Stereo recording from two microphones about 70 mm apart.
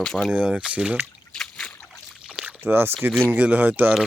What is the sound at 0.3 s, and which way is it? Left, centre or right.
Speech, centre.